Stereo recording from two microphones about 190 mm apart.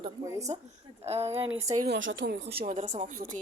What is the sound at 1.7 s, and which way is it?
Speech, 55° right (ahead or behind).